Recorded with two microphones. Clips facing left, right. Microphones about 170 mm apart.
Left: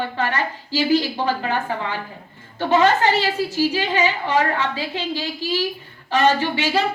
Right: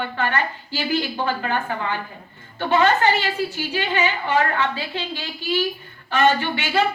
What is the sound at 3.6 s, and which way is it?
A woman's voice, 35° left (ahead or behind).